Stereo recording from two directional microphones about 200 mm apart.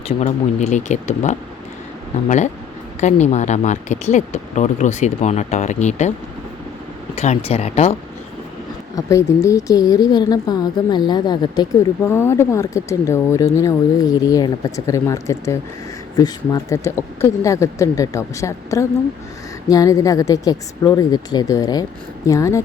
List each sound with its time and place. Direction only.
0.2 s speech: 35° left (ahead or behind)
3.0 s speech: 35° left (ahead or behind)
7.2 s speech: 30° left (ahead or behind)
9.0 s a woman's voice: 15° left (ahead or behind)